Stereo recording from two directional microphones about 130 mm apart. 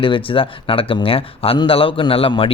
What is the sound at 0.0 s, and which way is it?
A man's voice, 45° left (ahead or behind).